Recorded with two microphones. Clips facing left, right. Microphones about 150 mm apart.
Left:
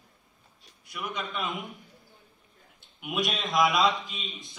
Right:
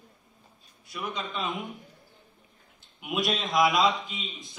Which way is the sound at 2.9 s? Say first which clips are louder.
Right 2 dB; centre (ahead or behind).